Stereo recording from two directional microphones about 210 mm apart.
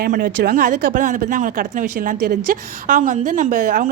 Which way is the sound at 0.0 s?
45° right (ahead or behind).